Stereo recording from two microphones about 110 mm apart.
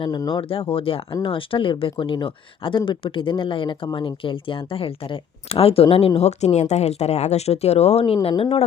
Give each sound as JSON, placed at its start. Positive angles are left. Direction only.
{"t": 0.0, "sound": "speech", "side_deg": 40}